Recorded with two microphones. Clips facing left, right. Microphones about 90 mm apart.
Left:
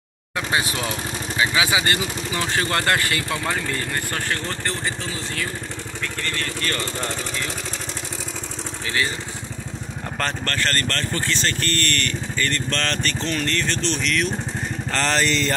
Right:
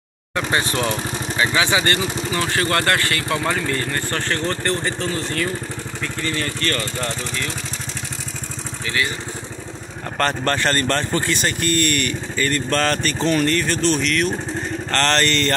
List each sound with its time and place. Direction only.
0.4 s speech: 10° left (ahead or behind)
6.2 s speech: 5° right (ahead or behind)
8.8 s speech: 30° left (ahead or behind)
10.4 s speech: 20° right (ahead or behind); by 15.5 s centre (ahead or behind)